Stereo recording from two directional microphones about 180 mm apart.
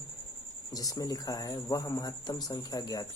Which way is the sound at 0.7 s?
20° left (ahead or behind).